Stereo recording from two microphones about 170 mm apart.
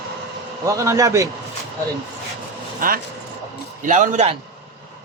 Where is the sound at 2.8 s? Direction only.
55° right (ahead or behind).